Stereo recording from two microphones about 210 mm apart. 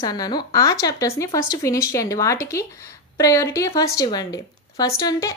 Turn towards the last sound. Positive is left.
turn(degrees=15)  # may be behind; listen again after turning